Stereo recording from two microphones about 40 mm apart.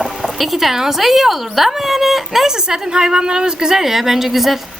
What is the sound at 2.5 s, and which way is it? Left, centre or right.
A woman's voice, centre.